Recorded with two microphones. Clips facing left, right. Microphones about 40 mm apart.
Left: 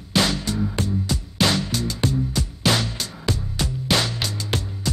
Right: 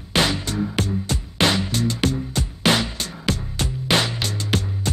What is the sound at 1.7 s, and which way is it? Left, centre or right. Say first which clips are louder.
Music: right 2 dB; right.